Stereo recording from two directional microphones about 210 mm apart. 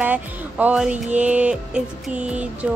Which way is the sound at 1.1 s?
5° right (ahead or behind).